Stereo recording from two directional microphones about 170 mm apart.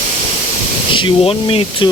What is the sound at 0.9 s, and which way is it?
Speech, 30° left (ahead or behind).